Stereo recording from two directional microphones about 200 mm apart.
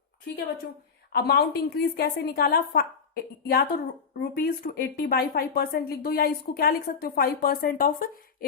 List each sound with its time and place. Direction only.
1.1 s speech: 50° left (ahead or behind)